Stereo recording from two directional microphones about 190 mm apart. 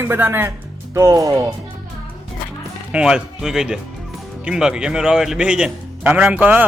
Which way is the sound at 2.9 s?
5° right (ahead or behind).